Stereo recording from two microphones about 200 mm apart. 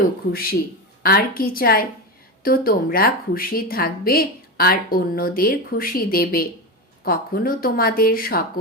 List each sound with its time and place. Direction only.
1.0 s a woman's voice: 45° left (ahead or behind)